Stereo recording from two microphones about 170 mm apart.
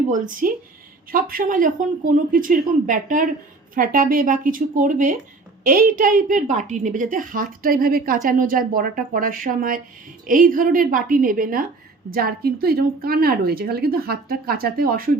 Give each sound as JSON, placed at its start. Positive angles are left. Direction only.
{"t": 0.1, "sound": "a woman's voice", "side_deg": -55}